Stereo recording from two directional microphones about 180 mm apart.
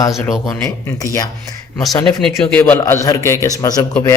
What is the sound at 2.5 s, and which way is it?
A man's voice, 10° left (ahead or behind).